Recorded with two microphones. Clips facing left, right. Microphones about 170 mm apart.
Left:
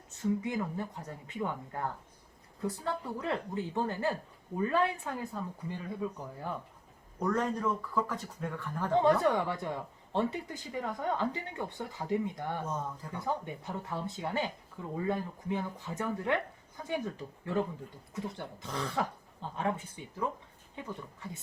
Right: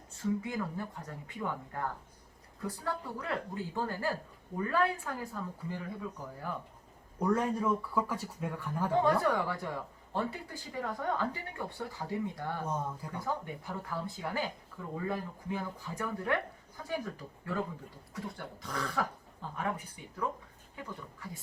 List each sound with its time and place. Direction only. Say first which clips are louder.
0.2 s speech: left 2 dB; 20° left (ahead or behind)
7.2 s speech: right 1 dB; 10° right (ahead or behind)
9.0 s speech: left 3 dB; 20° left (ahead or behind)